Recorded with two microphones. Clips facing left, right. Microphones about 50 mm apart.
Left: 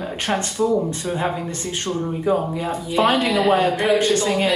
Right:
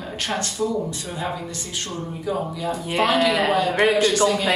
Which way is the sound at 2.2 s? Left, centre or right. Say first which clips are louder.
Left 3 dB; left.